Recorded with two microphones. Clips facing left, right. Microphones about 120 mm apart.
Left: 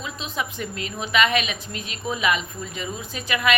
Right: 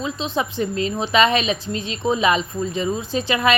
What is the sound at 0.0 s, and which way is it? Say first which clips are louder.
A woman's voice: right 6 dB; 30° right (ahead or behind).